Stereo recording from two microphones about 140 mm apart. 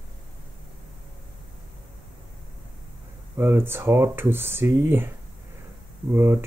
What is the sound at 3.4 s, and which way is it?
Speech, 15° right (ahead or behind).